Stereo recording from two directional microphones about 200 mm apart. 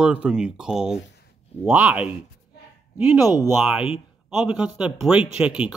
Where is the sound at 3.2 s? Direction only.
15° left (ahead or behind).